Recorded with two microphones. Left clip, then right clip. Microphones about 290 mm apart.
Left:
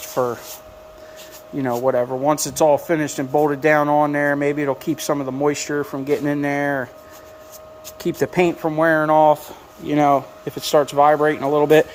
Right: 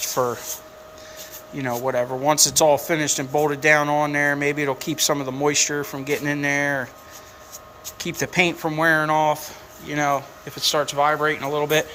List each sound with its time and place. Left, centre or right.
0.0 s a sound: centre
1.5 s speech: centre
7.9 s speech: centre
9.8 s speech: left